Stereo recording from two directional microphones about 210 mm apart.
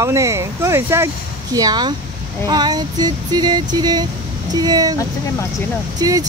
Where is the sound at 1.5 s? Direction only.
20° right (ahead or behind).